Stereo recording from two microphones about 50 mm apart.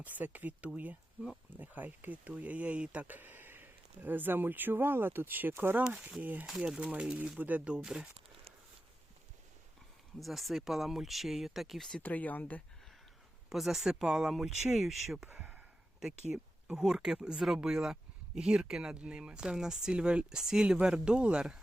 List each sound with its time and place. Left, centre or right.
0.0 s speech: right
5.9 s speech: right
7.3 s speech: right
7.7 s speech: centre
10.2 s speech: centre
12.0 s speech: left
13.5 s speech: centre
15.4 s a sound: right
16.0 s speech: centre